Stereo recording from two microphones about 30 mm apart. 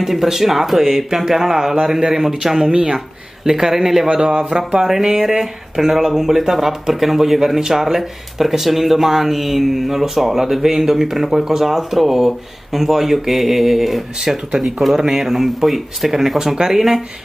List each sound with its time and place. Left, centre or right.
0.0 s speech: centre
2.7 s speech: right
3.4 s speech: centre
4.2 s speech: right
5.2 s speech: centre
14.2 s speech: centre